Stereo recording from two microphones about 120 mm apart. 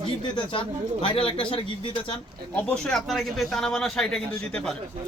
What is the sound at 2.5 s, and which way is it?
A man's voice, 10° left (ahead or behind).